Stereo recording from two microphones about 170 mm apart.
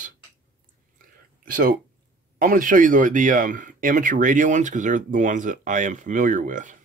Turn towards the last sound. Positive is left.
turn(degrees=-50)  # may be behind; listen again after turning